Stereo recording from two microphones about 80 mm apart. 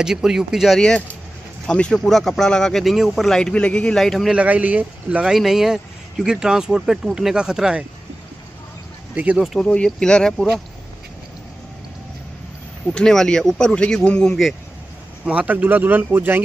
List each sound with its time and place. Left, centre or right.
0.0 s speech: centre
0.7 s speech: centre
4.3 s speech: centre
5.3 s speech: centre
9.1 s speech: centre
9.6 s speech: centre
12.9 s speech: centre
15.2 s speech: centre